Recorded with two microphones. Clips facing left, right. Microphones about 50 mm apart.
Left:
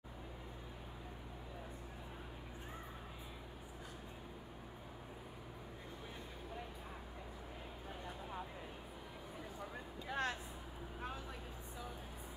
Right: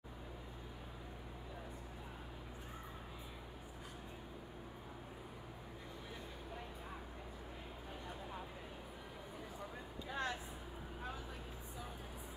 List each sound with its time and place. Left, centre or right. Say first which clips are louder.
10.0 s vehicle: left 2 dB; left